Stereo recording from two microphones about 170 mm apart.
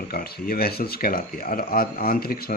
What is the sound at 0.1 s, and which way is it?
A man's voice, 60° left (ahead or behind).